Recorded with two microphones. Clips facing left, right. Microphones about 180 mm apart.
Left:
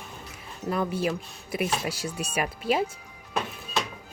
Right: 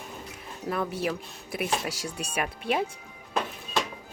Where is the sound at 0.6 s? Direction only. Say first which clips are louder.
Left 2 dB; centre (ahead or behind).